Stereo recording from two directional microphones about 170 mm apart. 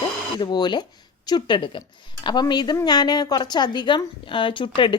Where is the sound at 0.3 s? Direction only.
25° left (ahead or behind).